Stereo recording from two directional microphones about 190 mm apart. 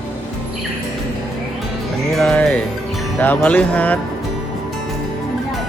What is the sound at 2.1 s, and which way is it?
Music, 5° left (ahead or behind).